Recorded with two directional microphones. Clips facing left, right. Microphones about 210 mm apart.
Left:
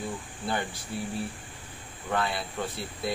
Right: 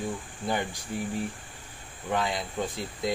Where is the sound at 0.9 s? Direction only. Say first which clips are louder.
Right 2 dB; 15° right (ahead or behind).